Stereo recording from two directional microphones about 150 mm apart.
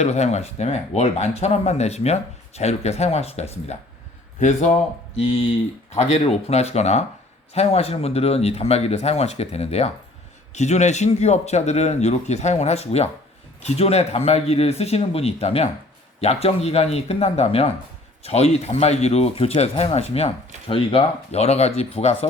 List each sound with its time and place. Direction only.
0.0 s speech: 45° left (ahead or behind)
5.2 s speech: 40° left (ahead or behind)